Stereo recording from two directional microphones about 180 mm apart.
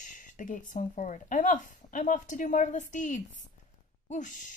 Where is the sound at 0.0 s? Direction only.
45° left (ahead or behind).